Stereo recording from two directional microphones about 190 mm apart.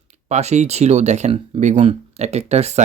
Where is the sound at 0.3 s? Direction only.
35° right (ahead or behind).